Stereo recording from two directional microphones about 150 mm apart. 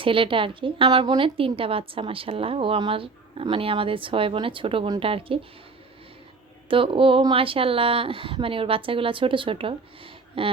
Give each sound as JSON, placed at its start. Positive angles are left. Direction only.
{"t": 0.0, "sound": "a woman's voice", "side_deg": -35}
{"t": 6.7, "sound": "a woman's voice", "side_deg": -35}